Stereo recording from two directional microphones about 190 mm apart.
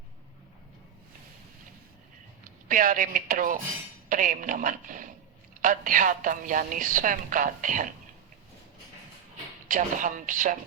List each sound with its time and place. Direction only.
2.4 s a woman's voice: 45° right (ahead or behind)
9.6 s a woman's voice: 45° right (ahead or behind)